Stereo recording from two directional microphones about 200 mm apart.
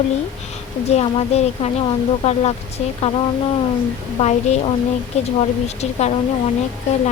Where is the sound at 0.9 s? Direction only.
30° left (ahead or behind).